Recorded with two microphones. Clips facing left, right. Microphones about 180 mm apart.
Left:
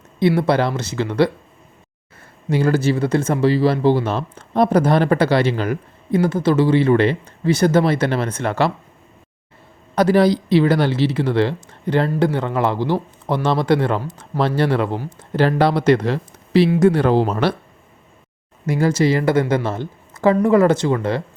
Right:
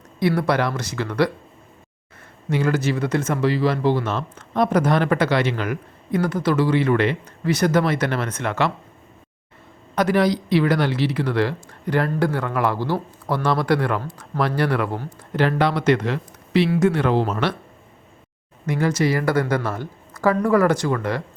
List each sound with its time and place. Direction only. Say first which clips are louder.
0.2 s speech: left 4 dB; 25° left (ahead or behind)
2.5 s speech: left 4 dB; 35° left (ahead or behind)
9.9 s speech: left 4 dB; 30° left (ahead or behind)
18.6 s speech: left 3 dB; 30° left (ahead or behind)